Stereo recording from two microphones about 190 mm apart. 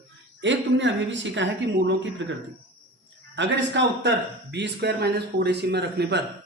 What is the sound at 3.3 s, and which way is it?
Speech, 70° right (ahead or behind).